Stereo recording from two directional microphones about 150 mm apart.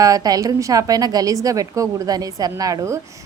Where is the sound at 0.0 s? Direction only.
25° right (ahead or behind).